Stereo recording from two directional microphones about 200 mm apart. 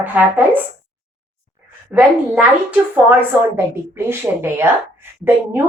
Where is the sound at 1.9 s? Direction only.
5° right (ahead or behind).